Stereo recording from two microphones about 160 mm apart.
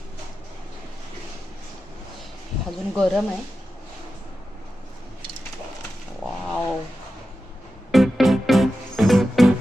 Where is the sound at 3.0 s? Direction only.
Centre (ahead or behind).